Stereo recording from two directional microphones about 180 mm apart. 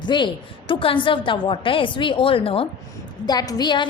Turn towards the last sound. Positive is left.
turn(degrees=25)  # may be behind; listen again after turning